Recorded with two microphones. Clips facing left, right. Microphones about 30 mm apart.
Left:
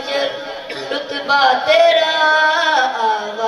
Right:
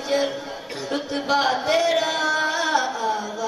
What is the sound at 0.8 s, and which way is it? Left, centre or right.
Chant, left.